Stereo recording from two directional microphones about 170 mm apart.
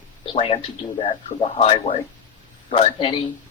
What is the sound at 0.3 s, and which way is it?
A man's voice, 35° left (ahead or behind).